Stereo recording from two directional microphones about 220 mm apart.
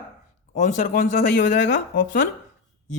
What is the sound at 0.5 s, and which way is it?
Speech, 35° left (ahead or behind).